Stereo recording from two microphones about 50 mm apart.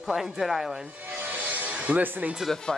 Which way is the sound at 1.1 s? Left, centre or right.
Right.